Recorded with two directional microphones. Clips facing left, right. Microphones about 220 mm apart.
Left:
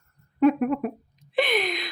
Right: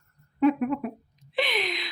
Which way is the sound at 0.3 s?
50° left (ahead or behind).